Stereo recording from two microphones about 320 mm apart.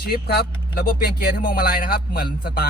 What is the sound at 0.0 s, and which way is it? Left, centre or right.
Speech, left.